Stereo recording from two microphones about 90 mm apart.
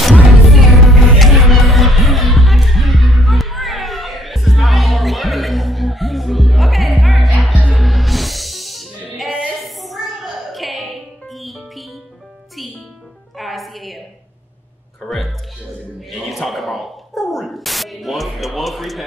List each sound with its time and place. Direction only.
0.0 s music: centre (ahead or behind)
7.3 s music: 15° right (ahead or behind)
7.7 s music: centre (ahead or behind)
9.3 s a sound: 5° right (ahead or behind)
13.4 s music: centre (ahead or behind)
16.1 s spray: centre (ahead or behind)